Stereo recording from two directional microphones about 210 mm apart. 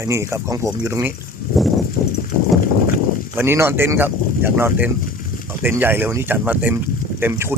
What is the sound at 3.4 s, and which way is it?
Speech, 10° right (ahead or behind).